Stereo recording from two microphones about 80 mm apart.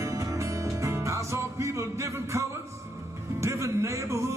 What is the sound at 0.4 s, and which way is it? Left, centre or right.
Music, right.